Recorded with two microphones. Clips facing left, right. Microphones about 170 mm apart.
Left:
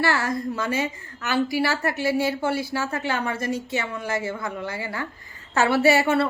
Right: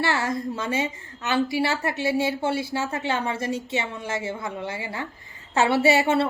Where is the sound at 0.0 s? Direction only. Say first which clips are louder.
Left 1 dB; 25° right (ahead or behind).